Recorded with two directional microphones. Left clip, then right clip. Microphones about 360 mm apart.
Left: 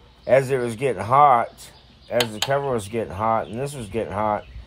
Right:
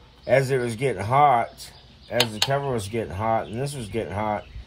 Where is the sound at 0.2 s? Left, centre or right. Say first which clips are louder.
Left 2 dB; centre.